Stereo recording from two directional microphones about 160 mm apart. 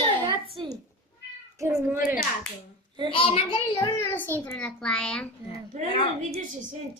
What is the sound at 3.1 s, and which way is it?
Speech, 35° left (ahead or behind).